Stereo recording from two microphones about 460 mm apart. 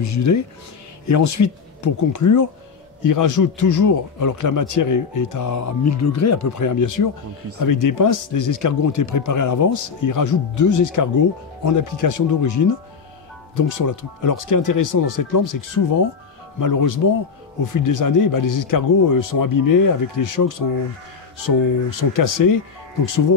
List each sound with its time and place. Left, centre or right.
0.0 s a man's voice: left